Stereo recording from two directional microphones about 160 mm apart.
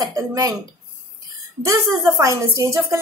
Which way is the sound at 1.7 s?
25° right (ahead or behind).